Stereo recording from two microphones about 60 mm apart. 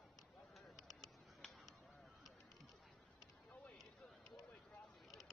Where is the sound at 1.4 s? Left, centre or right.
Centre.